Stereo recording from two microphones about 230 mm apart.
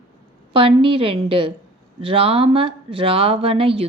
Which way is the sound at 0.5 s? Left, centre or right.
Right.